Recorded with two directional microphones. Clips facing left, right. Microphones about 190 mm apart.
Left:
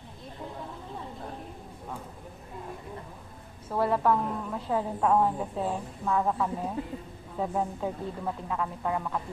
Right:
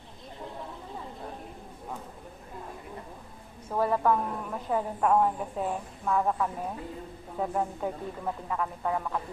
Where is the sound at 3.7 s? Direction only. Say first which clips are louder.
Even; 10° right (ahead or behind).